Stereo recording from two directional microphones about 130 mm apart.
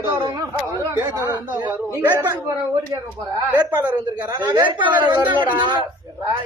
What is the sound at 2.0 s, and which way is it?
Speech, 15° right (ahead or behind).